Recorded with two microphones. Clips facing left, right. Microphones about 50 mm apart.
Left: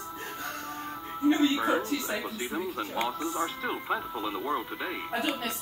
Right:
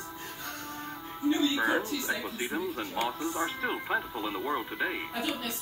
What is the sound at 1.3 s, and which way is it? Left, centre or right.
Speech, left.